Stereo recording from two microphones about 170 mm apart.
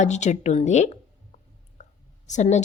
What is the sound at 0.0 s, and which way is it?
Speech, 45° left (ahead or behind).